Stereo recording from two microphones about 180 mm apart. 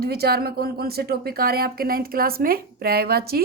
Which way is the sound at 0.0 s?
60° right (ahead or behind).